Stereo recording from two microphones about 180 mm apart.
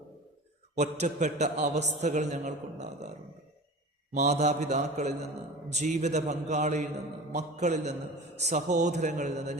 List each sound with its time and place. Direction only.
0.8 s a man's voice: 40° right (ahead or behind)
4.1 s a man's voice: 40° right (ahead or behind)